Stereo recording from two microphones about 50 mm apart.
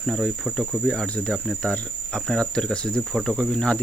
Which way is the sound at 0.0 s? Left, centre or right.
Centre.